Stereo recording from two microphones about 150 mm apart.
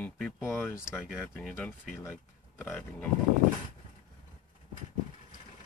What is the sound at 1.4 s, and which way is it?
Speech, 5° left (ahead or behind).